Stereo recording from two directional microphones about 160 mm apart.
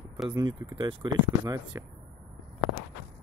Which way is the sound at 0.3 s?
25° right (ahead or behind).